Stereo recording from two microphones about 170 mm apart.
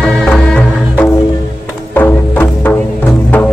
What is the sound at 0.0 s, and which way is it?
Music, 5° left (ahead or behind).